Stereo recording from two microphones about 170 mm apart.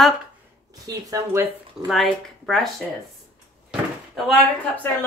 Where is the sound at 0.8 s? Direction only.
20° right (ahead or behind).